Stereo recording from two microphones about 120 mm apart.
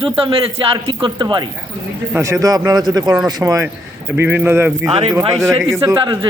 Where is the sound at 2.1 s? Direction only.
25° right (ahead or behind).